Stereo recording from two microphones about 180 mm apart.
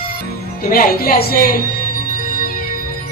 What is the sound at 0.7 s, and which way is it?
Speech, 55° left (ahead or behind).